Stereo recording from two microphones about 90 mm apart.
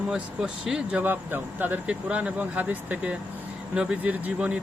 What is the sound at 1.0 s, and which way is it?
Speech, 20° right (ahead or behind).